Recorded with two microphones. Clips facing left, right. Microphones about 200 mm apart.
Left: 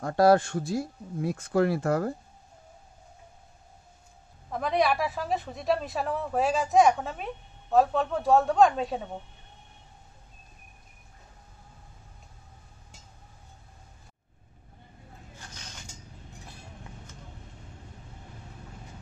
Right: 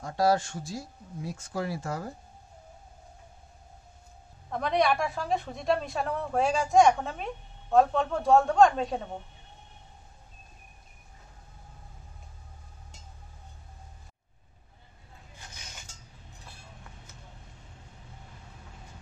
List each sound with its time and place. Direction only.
0.0 s speech: 55° left (ahead or behind)
4.5 s speech: centre (ahead or behind)
15.5 s vehicle: 10° right (ahead or behind)